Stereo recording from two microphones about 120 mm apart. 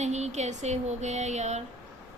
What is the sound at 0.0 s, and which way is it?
Speech, 70° right (ahead or behind).